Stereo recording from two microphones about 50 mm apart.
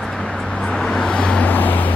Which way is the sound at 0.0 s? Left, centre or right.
Centre.